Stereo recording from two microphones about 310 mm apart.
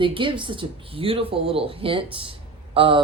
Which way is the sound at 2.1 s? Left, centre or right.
Centre.